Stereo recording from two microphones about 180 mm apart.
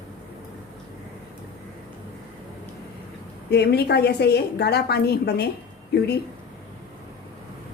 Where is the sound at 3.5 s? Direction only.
65° left (ahead or behind).